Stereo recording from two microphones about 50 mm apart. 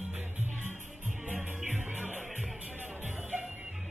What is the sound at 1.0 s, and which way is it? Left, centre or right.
Music, right.